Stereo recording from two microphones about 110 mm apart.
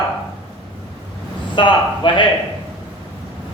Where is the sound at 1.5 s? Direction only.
50° left (ahead or behind).